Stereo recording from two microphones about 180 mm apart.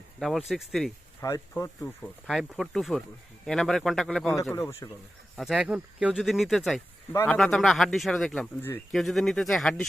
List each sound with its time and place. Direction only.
0.2 s speech: centre (ahead or behind)
1.2 s speech: 15° left (ahead or behind)
2.0 s speech: centre (ahead or behind)
4.8 s speech: 20° left (ahead or behind)
5.4 s speech: 5° right (ahead or behind)
7.1 s speech: 15° left (ahead or behind)
7.3 s speech: centre (ahead or behind)